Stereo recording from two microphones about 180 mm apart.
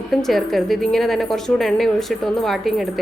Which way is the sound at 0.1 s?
Centre (ahead or behind).